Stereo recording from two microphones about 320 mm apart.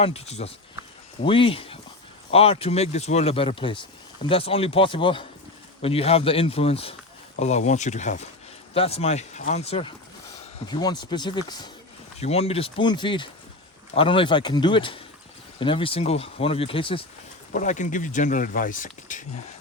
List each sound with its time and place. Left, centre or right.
0.0 s speech: centre